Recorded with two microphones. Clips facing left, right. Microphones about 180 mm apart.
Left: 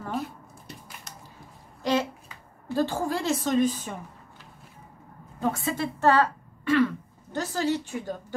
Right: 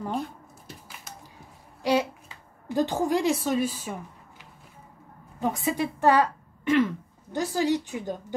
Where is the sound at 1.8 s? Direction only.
10° right (ahead or behind).